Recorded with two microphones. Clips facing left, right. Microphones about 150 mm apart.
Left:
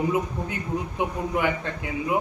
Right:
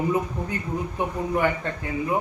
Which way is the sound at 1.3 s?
5° left (ahead or behind).